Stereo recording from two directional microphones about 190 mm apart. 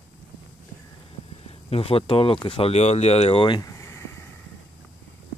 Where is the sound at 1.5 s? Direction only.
30° left (ahead or behind); by 4.2 s 15° left (ahead or behind).